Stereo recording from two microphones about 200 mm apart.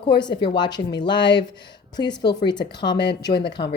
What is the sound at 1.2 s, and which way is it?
Speech, 60° left (ahead or behind).